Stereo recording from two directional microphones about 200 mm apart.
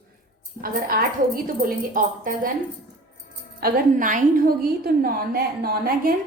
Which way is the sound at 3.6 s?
40° right (ahead or behind).